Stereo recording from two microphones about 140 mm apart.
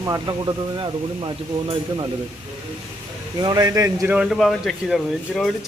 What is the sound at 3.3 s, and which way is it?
Speech, 25° right (ahead or behind).